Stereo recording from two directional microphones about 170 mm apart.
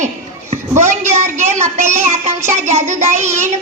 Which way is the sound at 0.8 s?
40° right (ahead or behind).